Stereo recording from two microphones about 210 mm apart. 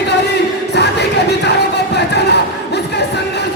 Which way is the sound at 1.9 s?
55° left (ahead or behind).